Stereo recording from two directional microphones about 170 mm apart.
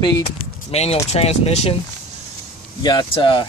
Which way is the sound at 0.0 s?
30° left (ahead or behind).